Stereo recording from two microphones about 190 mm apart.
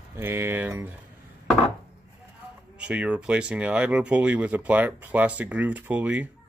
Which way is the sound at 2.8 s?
5° right (ahead or behind).